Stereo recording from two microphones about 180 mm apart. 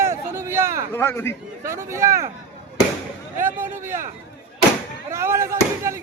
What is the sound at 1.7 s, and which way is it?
Speech, 15° right (ahead or behind).